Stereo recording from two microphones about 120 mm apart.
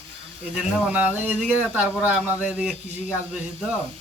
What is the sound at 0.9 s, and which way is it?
A man's voice, 15° right (ahead or behind).